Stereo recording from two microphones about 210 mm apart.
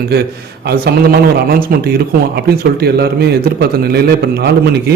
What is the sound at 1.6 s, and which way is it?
Speech, 45° right (ahead or behind).